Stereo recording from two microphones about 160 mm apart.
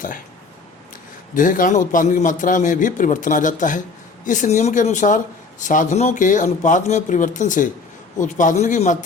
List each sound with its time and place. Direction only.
1.3 s a man's voice: 55° left (ahead or behind)